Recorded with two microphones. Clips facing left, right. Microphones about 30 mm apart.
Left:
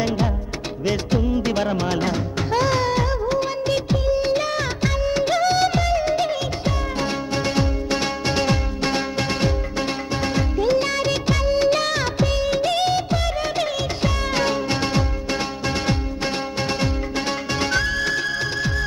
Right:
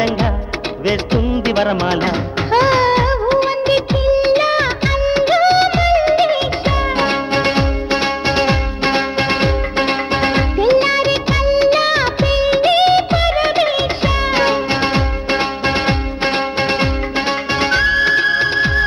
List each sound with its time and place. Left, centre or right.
0.8 s music of bollywood: right